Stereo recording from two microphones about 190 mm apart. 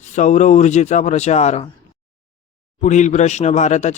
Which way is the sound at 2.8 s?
40° left (ahead or behind).